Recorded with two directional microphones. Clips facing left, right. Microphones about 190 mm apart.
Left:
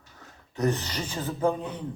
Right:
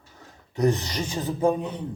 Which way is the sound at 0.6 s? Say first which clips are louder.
Right 4 dB; 10° right (ahead or behind).